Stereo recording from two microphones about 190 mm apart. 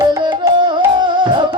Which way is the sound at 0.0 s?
20° right (ahead or behind).